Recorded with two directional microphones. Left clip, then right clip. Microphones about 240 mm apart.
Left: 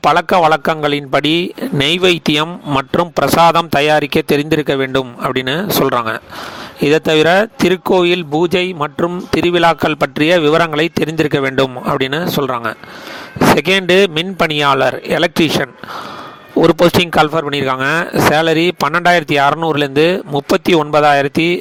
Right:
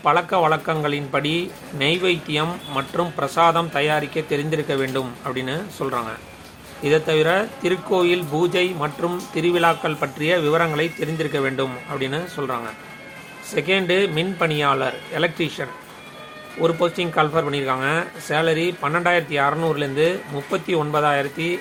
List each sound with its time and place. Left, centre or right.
0.0 s speech: left